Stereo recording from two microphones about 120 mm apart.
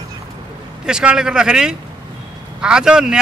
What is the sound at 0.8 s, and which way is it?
A man's voice, 5° right (ahead or behind).